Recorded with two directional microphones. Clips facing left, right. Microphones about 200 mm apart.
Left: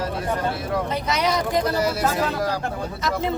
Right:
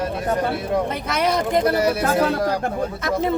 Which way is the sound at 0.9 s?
55° right (ahead or behind).